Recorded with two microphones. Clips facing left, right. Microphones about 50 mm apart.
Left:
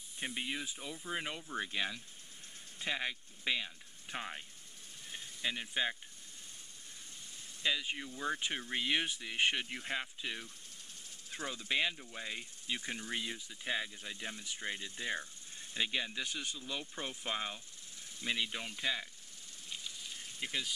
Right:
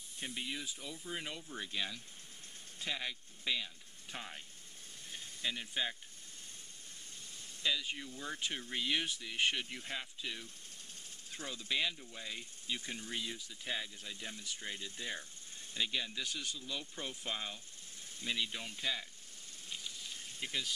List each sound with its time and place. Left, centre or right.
0.2 s speech: left
5.1 s snake: centre
7.6 s speech: left
20.3 s speech: centre